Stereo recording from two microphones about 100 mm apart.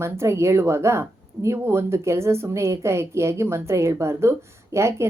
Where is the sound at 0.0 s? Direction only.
30° right (ahead or behind).